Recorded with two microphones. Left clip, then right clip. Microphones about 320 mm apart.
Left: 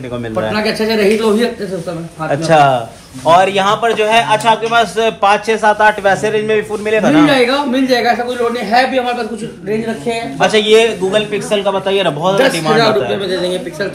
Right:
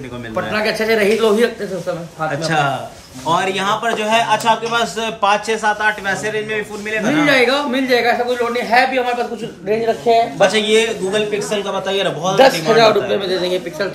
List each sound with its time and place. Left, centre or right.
0.5 s a man's voice: centre
2.4 s a man's voice: centre
10.4 s a man's voice: centre
12.4 s a man's voice: centre